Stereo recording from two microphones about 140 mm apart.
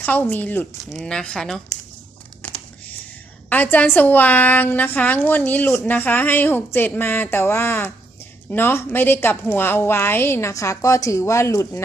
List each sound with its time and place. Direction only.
0.0 s a woman's voice: 10° left (ahead or behind)
3.5 s a woman's voice: 10° left (ahead or behind)